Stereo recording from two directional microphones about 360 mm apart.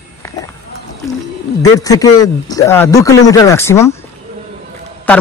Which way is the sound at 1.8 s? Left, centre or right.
Centre.